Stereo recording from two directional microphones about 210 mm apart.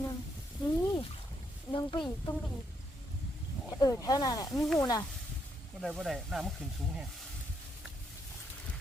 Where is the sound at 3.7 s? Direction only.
15° left (ahead or behind).